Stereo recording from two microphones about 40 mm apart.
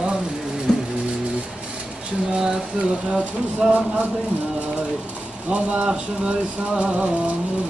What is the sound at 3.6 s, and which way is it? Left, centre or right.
Speech, centre.